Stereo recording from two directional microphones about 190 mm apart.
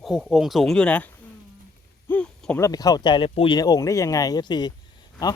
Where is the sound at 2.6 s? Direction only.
20° left (ahead or behind).